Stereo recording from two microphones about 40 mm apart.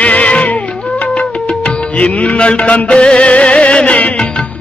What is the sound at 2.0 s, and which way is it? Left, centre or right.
Music, left.